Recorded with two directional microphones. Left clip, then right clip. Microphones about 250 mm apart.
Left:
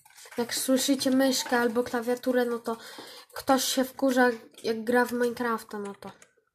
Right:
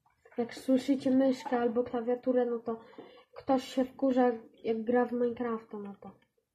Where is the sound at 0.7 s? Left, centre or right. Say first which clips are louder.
Left 3 dB; left.